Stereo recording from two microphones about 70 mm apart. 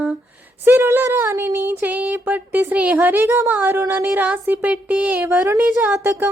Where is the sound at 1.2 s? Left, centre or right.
Right.